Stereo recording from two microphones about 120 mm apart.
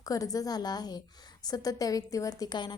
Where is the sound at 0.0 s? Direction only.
30° left (ahead or behind).